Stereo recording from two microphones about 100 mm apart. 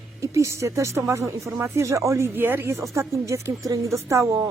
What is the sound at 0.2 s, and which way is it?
Speech, 30° right (ahead or behind).